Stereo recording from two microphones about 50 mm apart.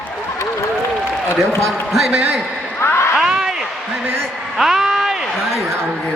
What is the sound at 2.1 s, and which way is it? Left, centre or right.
Speech, centre.